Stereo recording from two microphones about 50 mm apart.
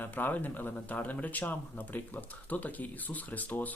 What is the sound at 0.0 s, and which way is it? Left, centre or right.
Speech, left.